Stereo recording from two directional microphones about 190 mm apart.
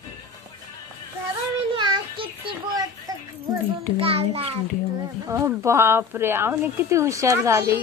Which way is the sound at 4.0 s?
30° right (ahead or behind).